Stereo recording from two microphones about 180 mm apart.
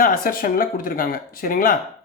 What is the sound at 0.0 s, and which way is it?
Speech, 50° left (ahead or behind).